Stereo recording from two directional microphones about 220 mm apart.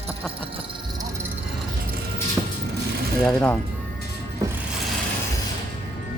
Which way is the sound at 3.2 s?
5° left (ahead or behind).